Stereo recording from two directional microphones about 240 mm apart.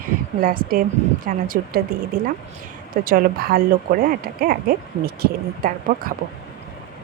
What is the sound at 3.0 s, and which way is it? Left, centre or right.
Speech, right.